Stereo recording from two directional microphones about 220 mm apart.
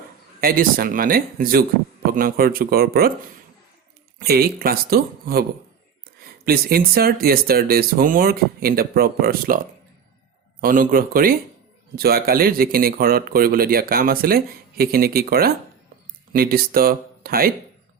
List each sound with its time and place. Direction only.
0.4 s speech: 40° right (ahead or behind)
4.2 s speech: 45° right (ahead or behind)
10.6 s speech: 40° right (ahead or behind)